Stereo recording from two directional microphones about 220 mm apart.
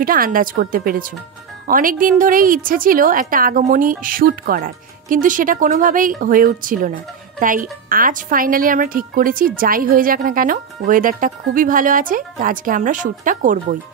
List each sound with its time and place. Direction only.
0.0 s a woman's voice: 40° right (ahead or behind)